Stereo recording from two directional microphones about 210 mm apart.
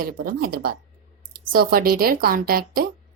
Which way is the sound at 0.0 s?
45° right (ahead or behind).